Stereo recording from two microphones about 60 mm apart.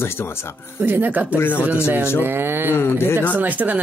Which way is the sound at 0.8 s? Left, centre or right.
Right.